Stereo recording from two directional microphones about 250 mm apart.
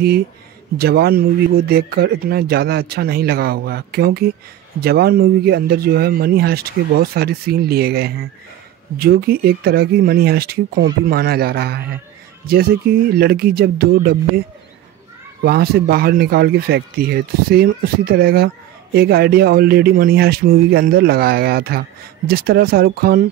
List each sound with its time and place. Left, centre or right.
0.7 s speech: right
15.4 s speech: right